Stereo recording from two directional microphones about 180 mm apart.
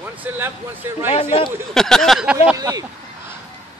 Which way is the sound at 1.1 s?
30° left (ahead or behind).